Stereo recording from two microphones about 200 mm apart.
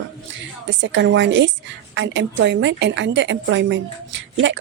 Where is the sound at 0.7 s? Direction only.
65° right (ahead or behind).